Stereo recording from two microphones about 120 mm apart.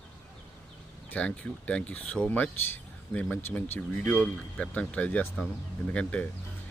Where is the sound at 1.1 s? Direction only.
10° left (ahead or behind).